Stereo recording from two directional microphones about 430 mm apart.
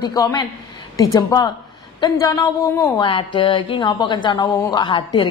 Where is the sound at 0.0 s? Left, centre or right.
Centre.